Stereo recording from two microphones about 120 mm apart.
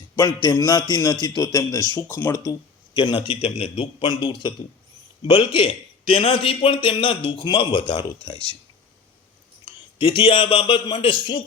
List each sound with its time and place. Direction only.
0.2 s music: 25° left (ahead or behind)
0.5 s a man's voice: 35° left (ahead or behind)
2.3 s speech: 30° left (ahead or behind)
3.2 s speech: 55° left (ahead or behind)
4.0 s a man's voice: 40° left (ahead or behind)
9.6 s a man's voice: 45° left (ahead or behind)